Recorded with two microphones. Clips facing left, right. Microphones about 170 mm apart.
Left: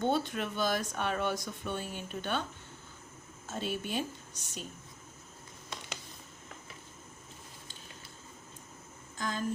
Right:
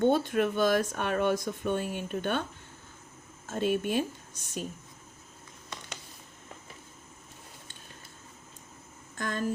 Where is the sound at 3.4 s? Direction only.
55° right (ahead or behind).